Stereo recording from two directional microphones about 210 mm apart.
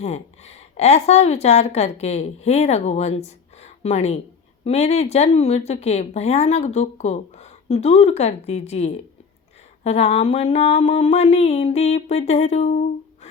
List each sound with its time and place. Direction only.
0.0 s speech: 30° left (ahead or behind)